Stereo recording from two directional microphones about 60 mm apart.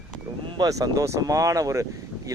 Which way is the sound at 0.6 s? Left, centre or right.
Right.